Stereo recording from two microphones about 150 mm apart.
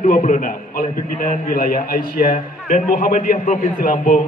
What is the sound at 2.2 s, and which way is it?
A man's voice, 65° left (ahead or behind).